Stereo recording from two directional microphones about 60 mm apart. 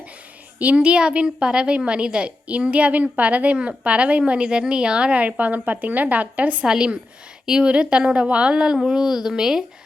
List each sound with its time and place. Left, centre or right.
0.6 s a woman's voice: centre